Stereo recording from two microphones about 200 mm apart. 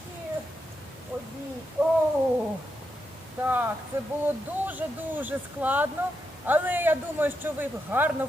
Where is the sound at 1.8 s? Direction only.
10° right (ahead or behind).